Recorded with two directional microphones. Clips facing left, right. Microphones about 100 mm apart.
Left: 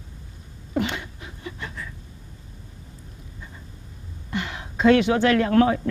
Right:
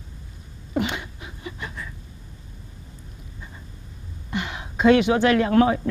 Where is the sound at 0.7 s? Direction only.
15° right (ahead or behind).